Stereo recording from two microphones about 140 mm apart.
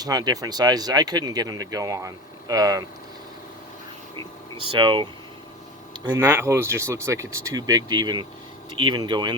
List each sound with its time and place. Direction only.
0.0 s speech: 25° right (ahead or behind)
4.2 s speech: 40° right (ahead or behind)
6.1 s speech: 20° right (ahead or behind)